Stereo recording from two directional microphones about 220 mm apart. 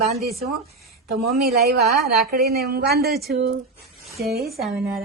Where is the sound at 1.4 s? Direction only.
45° right (ahead or behind).